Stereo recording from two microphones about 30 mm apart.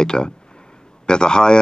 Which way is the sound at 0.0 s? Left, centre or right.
Left.